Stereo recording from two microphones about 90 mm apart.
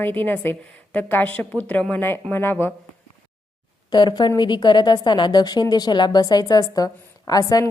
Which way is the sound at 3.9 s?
55° left (ahead or behind).